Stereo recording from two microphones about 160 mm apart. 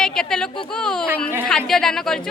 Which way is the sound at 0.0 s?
5° left (ahead or behind).